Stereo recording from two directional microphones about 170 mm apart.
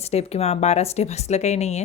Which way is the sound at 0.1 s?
40° left (ahead or behind).